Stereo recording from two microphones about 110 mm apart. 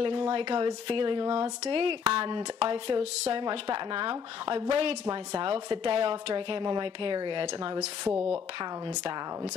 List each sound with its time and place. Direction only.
0.0 s a woman's voice: 50° right (ahead or behind)
3.0 s speech: 70° right (ahead or behind)
3.4 s a woman's voice: 45° right (ahead or behind)
8.1 s a woman's voice: 15° right (ahead or behind)
8.5 s a woman's voice: 45° right (ahead or behind)